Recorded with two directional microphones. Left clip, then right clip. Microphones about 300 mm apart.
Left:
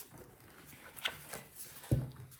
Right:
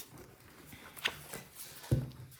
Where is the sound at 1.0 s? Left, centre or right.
Centre.